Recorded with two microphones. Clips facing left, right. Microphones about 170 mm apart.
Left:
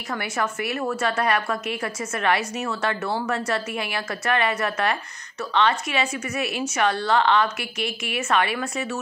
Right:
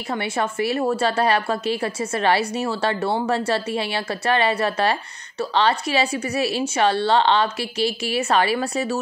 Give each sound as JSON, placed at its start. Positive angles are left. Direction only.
{"t": 0.1, "sound": "a woman's voice", "side_deg": -30}